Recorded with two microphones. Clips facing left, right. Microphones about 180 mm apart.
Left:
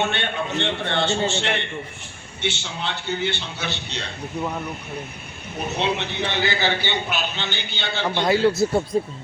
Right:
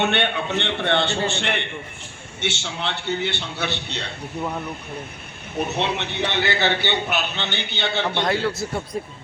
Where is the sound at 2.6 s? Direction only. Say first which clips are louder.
Right 2 dB; 65° right (ahead or behind).